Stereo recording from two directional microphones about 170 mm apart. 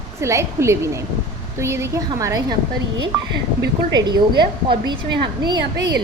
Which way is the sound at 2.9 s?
85° right.